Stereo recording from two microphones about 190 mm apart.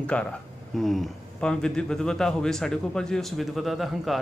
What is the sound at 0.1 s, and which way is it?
A man's voice, 5° left (ahead or behind).